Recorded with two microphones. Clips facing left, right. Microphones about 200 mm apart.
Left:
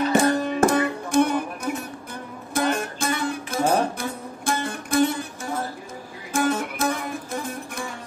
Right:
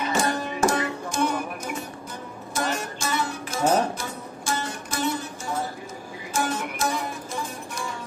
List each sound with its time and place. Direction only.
0.1 s music: 60° left (ahead or behind)